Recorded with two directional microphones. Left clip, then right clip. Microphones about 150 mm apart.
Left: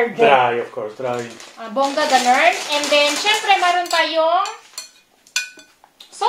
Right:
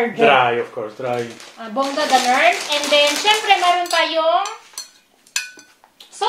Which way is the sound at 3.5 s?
15° left (ahead or behind).